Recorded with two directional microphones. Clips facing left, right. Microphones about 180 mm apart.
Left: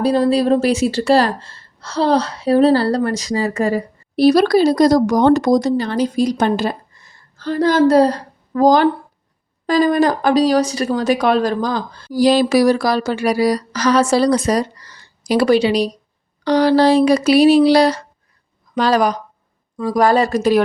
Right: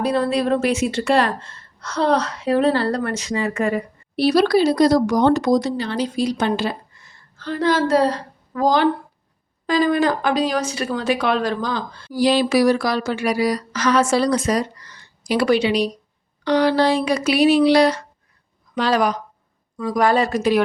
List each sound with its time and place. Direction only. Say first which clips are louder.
0.0 s a woman's voice: left 5 dB; 35° left (ahead or behind)